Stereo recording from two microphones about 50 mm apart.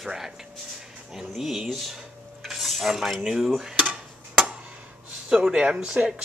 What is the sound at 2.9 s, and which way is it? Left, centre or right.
Speech, centre.